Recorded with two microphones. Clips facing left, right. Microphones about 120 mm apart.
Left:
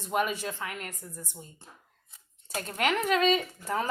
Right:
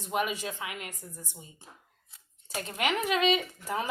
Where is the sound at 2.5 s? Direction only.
10° right (ahead or behind).